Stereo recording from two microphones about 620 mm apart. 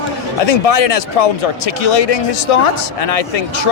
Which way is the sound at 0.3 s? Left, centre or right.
Left.